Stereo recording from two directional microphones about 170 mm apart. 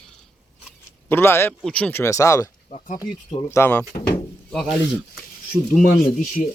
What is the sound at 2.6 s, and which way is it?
Speech, 45° left (ahead or behind).